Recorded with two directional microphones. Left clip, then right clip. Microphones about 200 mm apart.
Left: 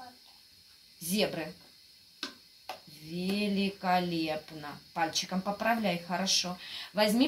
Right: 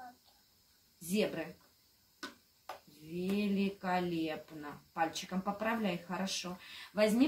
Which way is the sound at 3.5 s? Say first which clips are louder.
Left 8 dB; 30° left (ahead or behind).